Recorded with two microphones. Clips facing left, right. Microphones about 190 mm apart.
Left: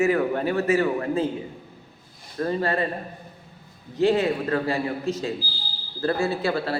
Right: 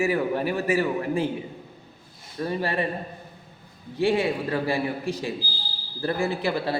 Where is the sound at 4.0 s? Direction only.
15° right (ahead or behind).